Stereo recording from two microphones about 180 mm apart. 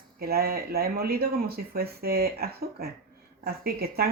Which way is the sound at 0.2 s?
60° right (ahead or behind).